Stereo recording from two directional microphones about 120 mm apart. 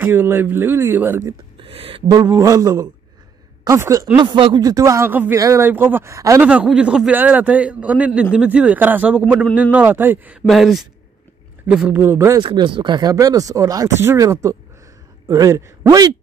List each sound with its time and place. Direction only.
0.0 s a man's voice: 15° right (ahead or behind)
1.6 s speech: 50° right (ahead or behind)
2.0 s speech: 35° right (ahead or behind)
4.2 s speech: 45° right (ahead or behind)
4.6 s speech: 30° right (ahead or behind)
6.4 s a man's voice: 10° right (ahead or behind)
10.4 s speech: centre (ahead or behind)
11.9 s speech: 20° right (ahead or behind)
12.4 s speech: 40° right (ahead or behind)